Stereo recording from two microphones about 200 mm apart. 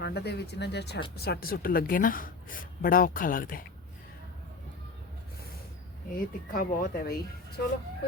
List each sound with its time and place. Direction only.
0.0 s a woman's voice: 55° left (ahead or behind)
6.1 s a woman's voice: 45° left (ahead or behind)